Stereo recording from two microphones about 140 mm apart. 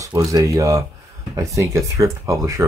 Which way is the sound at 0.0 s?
25° right (ahead or behind).